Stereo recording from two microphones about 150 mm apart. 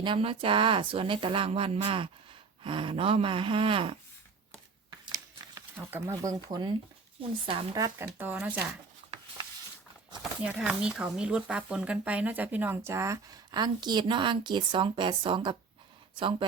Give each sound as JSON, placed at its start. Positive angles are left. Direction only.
{"t": 0.0, "sound": "speech", "side_deg": -35}
{"t": 5.7, "sound": "speech", "side_deg": -15}
{"t": 7.9, "sound": "speech", "side_deg": -15}
{"t": 10.4, "sound": "speech", "side_deg": -5}